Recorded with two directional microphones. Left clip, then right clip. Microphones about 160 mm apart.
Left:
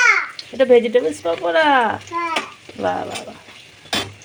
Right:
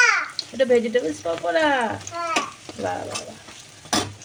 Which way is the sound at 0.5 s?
25° left (ahead or behind).